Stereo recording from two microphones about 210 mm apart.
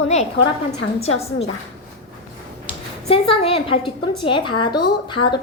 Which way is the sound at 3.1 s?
25° left (ahead or behind).